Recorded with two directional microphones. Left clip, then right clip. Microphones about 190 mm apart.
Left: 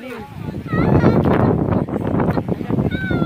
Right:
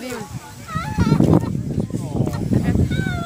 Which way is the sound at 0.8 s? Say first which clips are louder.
Left 7 dB; 50° right (ahead or behind).